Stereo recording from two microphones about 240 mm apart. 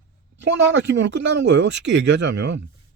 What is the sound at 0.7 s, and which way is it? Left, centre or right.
Speech, right.